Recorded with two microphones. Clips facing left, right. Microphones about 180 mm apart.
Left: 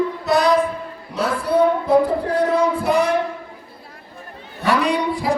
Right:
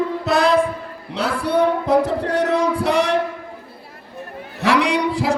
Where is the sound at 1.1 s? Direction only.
70° right (ahead or behind).